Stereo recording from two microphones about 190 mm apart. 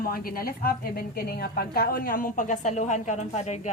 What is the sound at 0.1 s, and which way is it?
Speech, 50° left (ahead or behind).